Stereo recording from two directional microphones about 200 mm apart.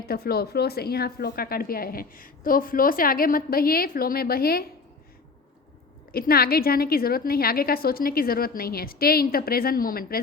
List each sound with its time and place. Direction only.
0.1 s speech: 50° left (ahead or behind)
6.1 s speech: 50° left (ahead or behind)